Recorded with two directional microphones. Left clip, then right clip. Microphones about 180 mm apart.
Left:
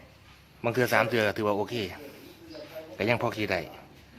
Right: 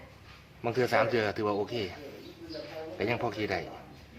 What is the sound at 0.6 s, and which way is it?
Speech, 50° left (ahead or behind).